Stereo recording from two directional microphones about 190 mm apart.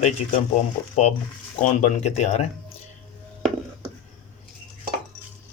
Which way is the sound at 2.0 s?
35° left (ahead or behind).